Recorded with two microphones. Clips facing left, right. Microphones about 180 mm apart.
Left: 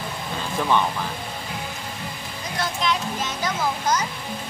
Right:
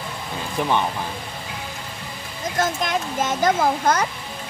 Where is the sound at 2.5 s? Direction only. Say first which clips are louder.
Right 2 dB; 45° right (ahead or behind).